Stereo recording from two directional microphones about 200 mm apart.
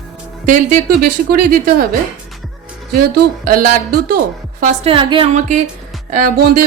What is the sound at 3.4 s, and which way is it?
Speech, 45° right (ahead or behind).